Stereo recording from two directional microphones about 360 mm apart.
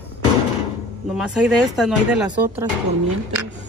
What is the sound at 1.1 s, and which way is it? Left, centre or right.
Speech, centre.